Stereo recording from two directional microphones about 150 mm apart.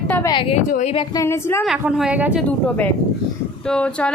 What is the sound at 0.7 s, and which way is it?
Speech, 55° left (ahead or behind).